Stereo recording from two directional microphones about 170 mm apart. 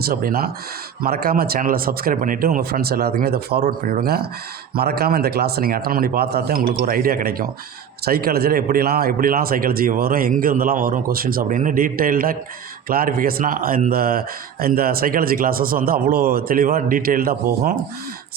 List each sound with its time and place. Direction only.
0.0 s speech: 60° right (ahead or behind)